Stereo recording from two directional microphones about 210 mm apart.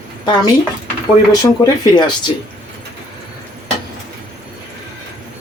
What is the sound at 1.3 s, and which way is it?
Speech, 20° left (ahead or behind).